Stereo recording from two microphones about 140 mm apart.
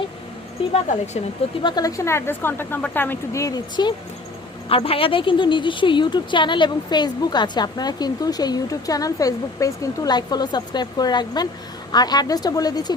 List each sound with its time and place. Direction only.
1.6 s speech: 25° left (ahead or behind)
4.7 s a woman's voice: 40° left (ahead or behind)